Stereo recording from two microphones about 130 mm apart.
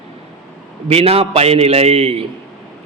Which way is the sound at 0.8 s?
50° right (ahead or behind).